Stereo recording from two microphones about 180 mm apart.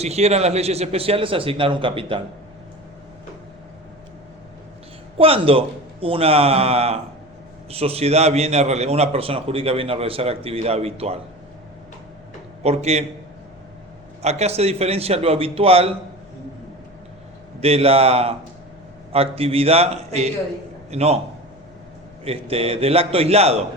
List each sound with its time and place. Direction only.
0.0 s a man's voice: 35° right (ahead or behind)
5.1 s a man's voice: 30° right (ahead or behind)
12.6 s a man's voice: 35° right (ahead or behind)
14.2 s a man's voice: 35° right (ahead or behind)
17.6 s a man's voice: 35° right (ahead or behind)
22.2 s a man's voice: 35° right (ahead or behind)